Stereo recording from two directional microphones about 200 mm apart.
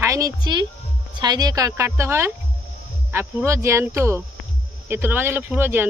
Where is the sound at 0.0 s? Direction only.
15° right (ahead or behind).